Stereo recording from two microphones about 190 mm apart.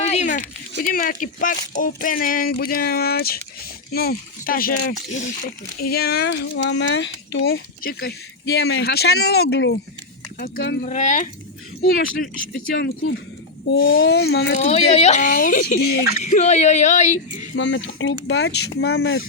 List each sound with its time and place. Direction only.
0.0 s a sound: 35° left (ahead or behind)
0.8 s speech: 50° left (ahead or behind)
5.8 s speech: 55° left (ahead or behind); by 7.6 s 75° left (ahead or behind)
7.8 s speech: 50° left (ahead or behind)
10.3 s speech: 50° left (ahead or behind)
10.8 s speech: 40° left (ahead or behind)
12.7 s speech: 65° left (ahead or behind)
14.5 s speech: 35° left (ahead or behind)
16.2 s speech: 40° left (ahead or behind)
17.5 s speech: 75° left (ahead or behind)